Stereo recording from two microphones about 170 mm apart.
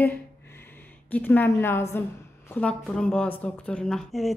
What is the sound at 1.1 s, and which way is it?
A woman's voice, 10° left (ahead or behind).